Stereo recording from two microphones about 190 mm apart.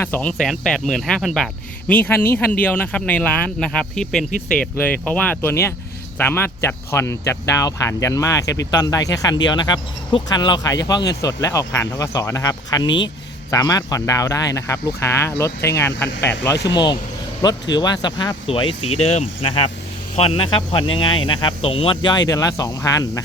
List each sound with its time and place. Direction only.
0.0 s speech: 10° left (ahead or behind)
16.7 s speech: 25° left (ahead or behind)